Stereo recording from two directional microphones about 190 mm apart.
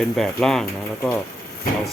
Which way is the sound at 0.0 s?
Centre (ahead or behind).